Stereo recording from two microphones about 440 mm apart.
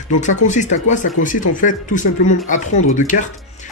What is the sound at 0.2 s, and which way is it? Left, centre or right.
Speech, centre.